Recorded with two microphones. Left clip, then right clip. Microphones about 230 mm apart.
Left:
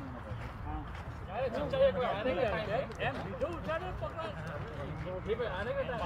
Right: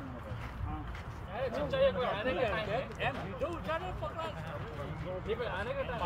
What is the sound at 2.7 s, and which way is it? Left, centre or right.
Speech, right.